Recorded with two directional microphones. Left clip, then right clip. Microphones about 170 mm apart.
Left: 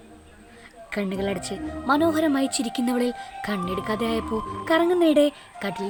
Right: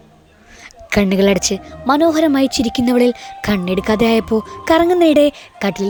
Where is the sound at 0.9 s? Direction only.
55° right (ahead or behind).